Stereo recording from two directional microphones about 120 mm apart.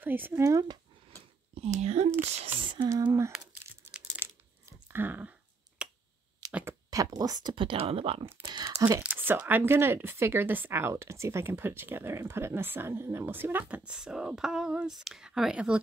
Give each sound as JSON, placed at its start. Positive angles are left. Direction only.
{"t": 0.0, "sound": "speech", "side_deg": -15}
{"t": 1.5, "sound": "speech", "side_deg": -60}
{"t": 2.2, "sound": "speech", "side_deg": -50}
{"t": 4.2, "sound": "crushing", "side_deg": -20}
{"t": 5.8, "sound": "finger snapping", "side_deg": -10}
{"t": 6.4, "sound": "a sound", "side_deg": -30}
{"t": 6.9, "sound": "speech", "side_deg": -30}
{"t": 8.8, "sound": "speech", "side_deg": -20}